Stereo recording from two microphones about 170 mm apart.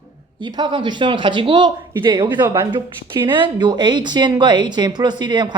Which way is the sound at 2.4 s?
15° right (ahead or behind).